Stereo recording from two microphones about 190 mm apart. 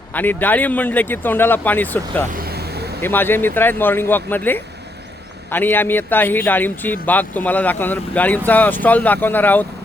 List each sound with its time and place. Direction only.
0.1 s a man's voice: 10° left (ahead or behind)
2.3 s vehicle: 55° right (ahead or behind)
3.0 s a man's voice: 10° left (ahead or behind)